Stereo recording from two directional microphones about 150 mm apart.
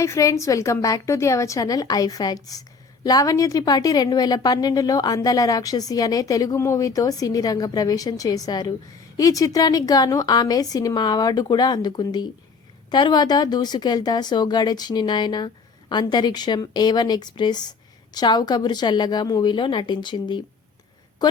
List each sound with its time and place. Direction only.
0.0 s a woman's voice: 20° left (ahead or behind)